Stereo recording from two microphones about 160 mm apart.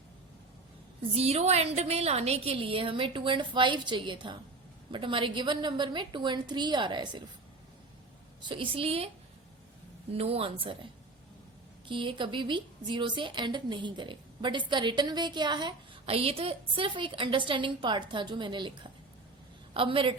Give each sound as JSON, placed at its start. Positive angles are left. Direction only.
{"t": 1.1, "sound": "a woman's voice", "side_deg": -40}
{"t": 8.4, "sound": "a woman's voice", "side_deg": -30}
{"t": 10.2, "sound": "a woman's voice", "side_deg": -40}
{"t": 11.9, "sound": "a woman's voice", "side_deg": -30}